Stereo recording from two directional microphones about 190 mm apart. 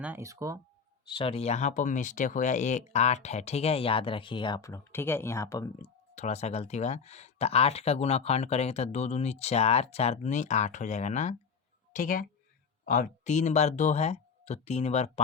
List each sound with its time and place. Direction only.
0.0 s speech: 10° right (ahead or behind)
1.0 s speech: 25° left (ahead or behind)
5.8 s a woman's voice: 35° left (ahead or behind)